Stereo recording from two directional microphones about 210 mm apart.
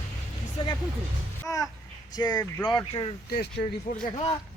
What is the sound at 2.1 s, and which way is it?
Speech, 20° left (ahead or behind).